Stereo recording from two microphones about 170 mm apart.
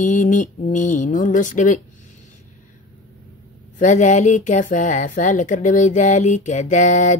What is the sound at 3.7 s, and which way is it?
Speech, 45° left (ahead or behind).